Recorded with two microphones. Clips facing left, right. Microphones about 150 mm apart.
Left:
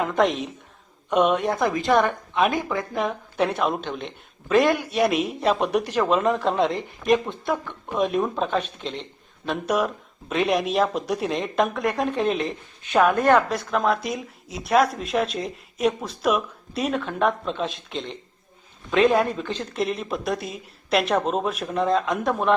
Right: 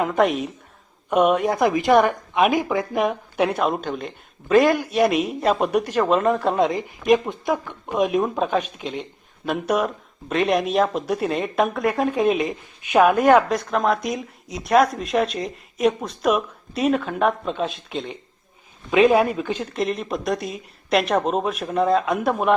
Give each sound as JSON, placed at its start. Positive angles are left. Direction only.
{"t": 0.0, "sound": "speech", "side_deg": -10}
{"t": 1.5, "sound": "a woman's voice", "side_deg": -20}
{"t": 13.5, "sound": "speech", "side_deg": 0}
{"t": 19.7, "sound": "speech", "side_deg": 0}